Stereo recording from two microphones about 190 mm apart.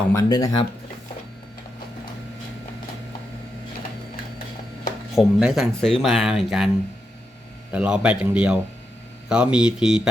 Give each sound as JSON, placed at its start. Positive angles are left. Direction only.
{"t": 0.1, "sound": "speech", "side_deg": 20}
{"t": 5.1, "sound": "speech", "side_deg": 0}
{"t": 7.7, "sound": "speech", "side_deg": -5}